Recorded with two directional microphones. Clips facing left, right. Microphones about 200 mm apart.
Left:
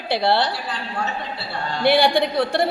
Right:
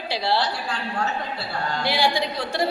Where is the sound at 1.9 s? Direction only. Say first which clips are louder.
Left 8 dB; 60° left (ahead or behind).